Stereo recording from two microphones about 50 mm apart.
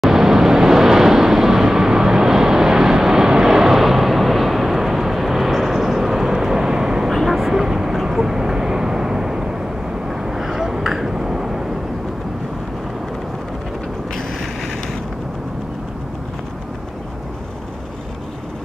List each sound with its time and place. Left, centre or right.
0.0 s vehicle: centre
7.1 s vehicle: centre